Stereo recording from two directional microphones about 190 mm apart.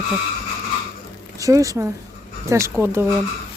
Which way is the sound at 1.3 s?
15° right (ahead or behind).